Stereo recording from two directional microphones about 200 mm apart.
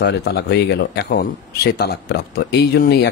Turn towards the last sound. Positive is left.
turn(degrees=55)  # may be behind; listen again after turning